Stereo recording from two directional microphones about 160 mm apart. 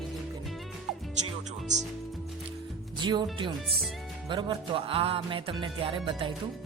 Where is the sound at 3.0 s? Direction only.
30° right (ahead or behind).